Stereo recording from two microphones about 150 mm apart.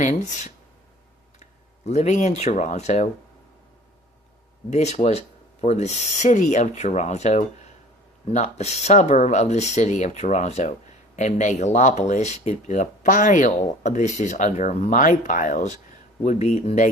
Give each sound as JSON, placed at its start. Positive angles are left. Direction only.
{"t": 0.0, "sound": "speech", "side_deg": 55}
{"t": 4.7, "sound": "speech", "side_deg": 45}